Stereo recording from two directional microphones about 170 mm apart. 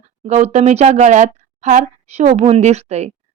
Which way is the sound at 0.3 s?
40° right (ahead or behind).